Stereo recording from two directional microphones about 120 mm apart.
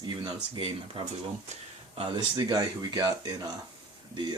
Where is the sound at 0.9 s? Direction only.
50° right (ahead or behind).